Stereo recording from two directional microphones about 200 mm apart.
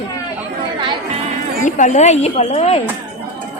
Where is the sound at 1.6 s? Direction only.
40° left (ahead or behind).